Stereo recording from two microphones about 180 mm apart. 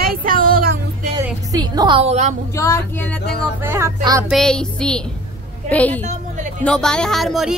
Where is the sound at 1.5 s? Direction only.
25° right (ahead or behind).